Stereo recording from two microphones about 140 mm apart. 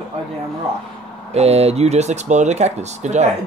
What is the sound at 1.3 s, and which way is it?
Speech, 50° right (ahead or behind).